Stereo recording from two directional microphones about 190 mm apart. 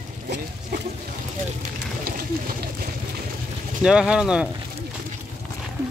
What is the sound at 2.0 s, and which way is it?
Pigeon, 50° right (ahead or behind).